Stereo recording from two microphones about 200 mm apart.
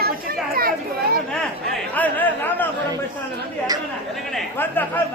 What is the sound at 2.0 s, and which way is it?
Speech, 10° left (ahead or behind).